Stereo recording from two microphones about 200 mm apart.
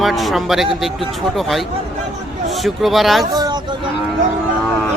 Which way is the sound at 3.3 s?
20° right (ahead or behind).